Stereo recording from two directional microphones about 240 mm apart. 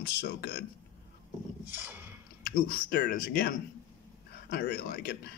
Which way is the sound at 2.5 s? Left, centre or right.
Left.